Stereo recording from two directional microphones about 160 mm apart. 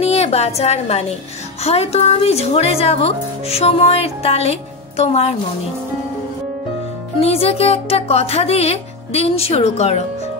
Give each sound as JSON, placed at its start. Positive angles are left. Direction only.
{"t": 0.0, "sound": "a woman's voice", "side_deg": 40}
{"t": 7.2, "sound": "speech", "side_deg": 40}